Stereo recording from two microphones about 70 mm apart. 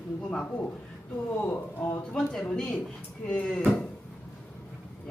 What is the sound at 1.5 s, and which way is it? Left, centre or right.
Speech, left.